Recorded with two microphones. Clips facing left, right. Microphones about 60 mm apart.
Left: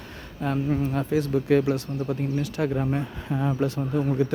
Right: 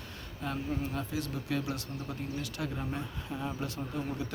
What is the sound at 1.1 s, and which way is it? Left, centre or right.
Speech, left.